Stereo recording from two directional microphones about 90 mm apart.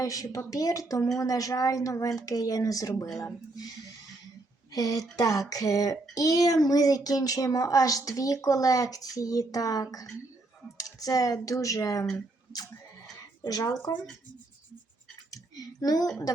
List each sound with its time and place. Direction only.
0.0 s speech: 40° left (ahead or behind)
4.7 s speech: 40° left (ahead or behind)
13.4 s speech: 40° left (ahead or behind)
15.3 s a sound: 45° left (ahead or behind)